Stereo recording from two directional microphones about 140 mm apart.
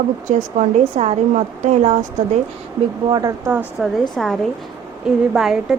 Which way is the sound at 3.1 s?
25° right (ahead or behind).